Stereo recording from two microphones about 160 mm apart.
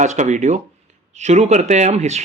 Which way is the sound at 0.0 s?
50° right (ahead or behind).